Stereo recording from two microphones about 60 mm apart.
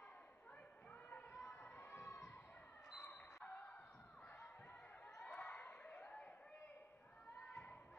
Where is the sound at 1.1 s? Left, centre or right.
Left.